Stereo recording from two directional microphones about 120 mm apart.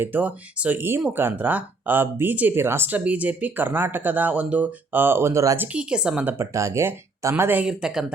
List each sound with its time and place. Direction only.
0.0 s speech: 15° right (ahead or behind)
5.7 s speech: 10° right (ahead or behind)